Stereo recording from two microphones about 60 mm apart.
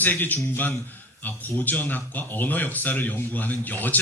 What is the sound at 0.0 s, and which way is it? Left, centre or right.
A man's voice, left.